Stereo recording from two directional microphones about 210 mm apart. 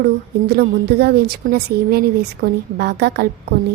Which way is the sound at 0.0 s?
50° right (ahead or behind).